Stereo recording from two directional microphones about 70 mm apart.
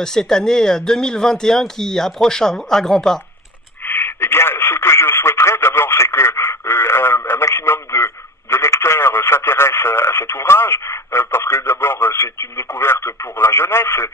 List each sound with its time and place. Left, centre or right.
0.0 s speech: centre
3.8 s radio: left